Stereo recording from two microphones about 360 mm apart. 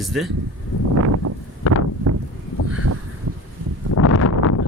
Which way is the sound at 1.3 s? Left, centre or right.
Right.